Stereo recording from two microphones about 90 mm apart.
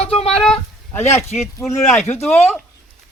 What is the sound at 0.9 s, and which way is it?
Speech, 30° left (ahead or behind).